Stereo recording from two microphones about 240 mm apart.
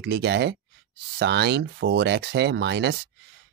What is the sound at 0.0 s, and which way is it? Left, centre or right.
Speech, right.